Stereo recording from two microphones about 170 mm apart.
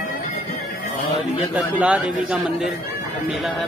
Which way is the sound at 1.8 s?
5° right (ahead or behind).